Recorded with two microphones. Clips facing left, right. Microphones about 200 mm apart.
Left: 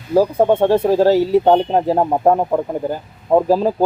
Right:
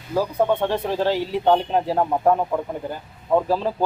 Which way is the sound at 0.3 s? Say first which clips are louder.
Left 6 dB; 25° left (ahead or behind).